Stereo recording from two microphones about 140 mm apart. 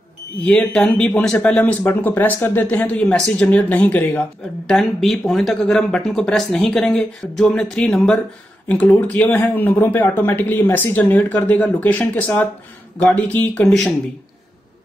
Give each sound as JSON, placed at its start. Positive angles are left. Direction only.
{"t": 0.4, "sound": "speech", "side_deg": 5}